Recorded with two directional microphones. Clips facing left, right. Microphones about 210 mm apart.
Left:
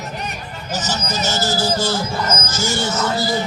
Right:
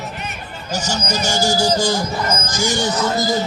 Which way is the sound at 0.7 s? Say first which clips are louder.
Right 2 dB; 15° right (ahead or behind).